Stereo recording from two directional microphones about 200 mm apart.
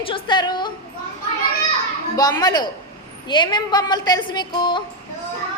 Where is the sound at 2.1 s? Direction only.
20° left (ahead or behind).